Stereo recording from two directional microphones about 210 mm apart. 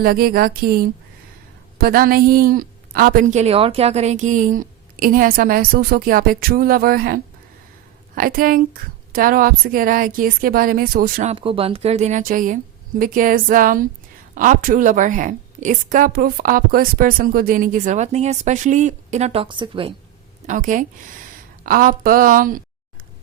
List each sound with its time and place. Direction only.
0.0 s a woman's voice: 45° right (ahead or behind)
11.3 s a woman's voice: 25° right (ahead or behind)
20.5 s a woman's voice: 40° right (ahead or behind)